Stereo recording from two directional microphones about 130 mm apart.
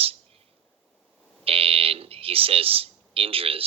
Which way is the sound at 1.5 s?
45° right (ahead or behind).